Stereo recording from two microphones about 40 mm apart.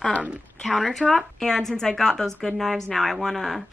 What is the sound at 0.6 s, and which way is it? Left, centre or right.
A woman's voice, centre.